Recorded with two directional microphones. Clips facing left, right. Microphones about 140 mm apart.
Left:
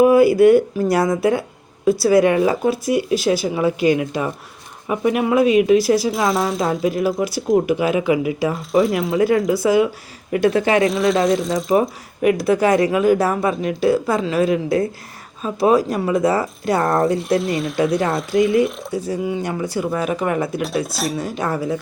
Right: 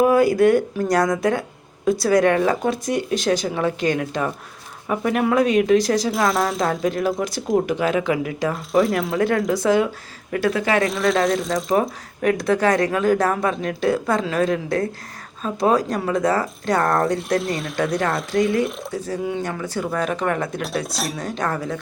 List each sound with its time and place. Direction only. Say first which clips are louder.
0.0 s speech: left 4 dB; 10° left (ahead or behind)
10.3 s speech: left 4 dB; 25° left (ahead or behind)
10.8 s speech: left 3 dB; centre (ahead or behind)